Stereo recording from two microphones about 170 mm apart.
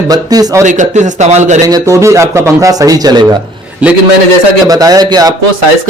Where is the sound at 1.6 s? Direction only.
20° right (ahead or behind).